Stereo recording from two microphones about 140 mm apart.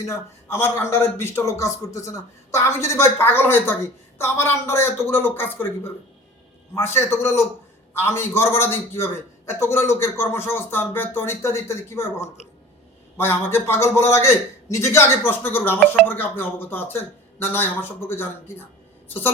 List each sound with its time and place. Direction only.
0.1 s a man's voice: 15° left (ahead or behind)